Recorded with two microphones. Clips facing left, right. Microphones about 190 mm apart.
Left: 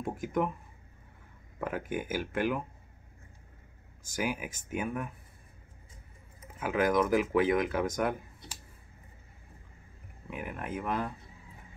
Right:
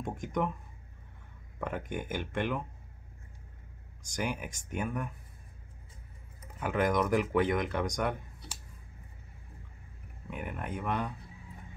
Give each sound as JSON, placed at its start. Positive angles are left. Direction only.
{"t": 0.0, "sound": "speech", "side_deg": 5}
{"t": 1.6, "sound": "speech", "side_deg": 5}
{"t": 4.0, "sound": "speech", "side_deg": 5}
{"t": 6.6, "sound": "speech", "side_deg": 0}
{"t": 10.3, "sound": "speech", "side_deg": 0}